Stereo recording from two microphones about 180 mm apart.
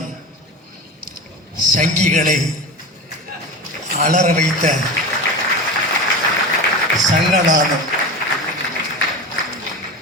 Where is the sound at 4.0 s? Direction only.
45° right (ahead or behind).